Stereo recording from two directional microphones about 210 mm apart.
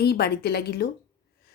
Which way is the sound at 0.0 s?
50° left (ahead or behind).